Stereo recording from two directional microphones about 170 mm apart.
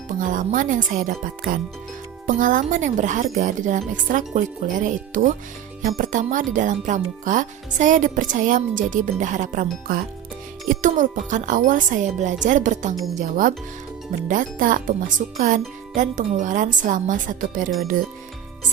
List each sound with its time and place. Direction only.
0.1 s speech: 50° right (ahead or behind)